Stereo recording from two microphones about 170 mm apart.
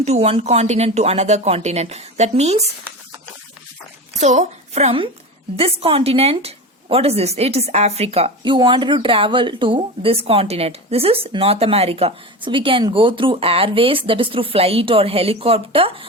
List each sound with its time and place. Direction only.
0.0 s a woman's voice: 40° right (ahead or behind)
4.2 s a woman's voice: 40° right (ahead or behind)